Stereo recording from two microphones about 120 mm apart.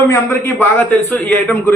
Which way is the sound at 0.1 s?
20° left (ahead or behind).